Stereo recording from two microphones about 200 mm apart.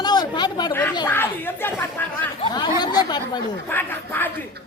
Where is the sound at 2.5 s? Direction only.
20° left (ahead or behind).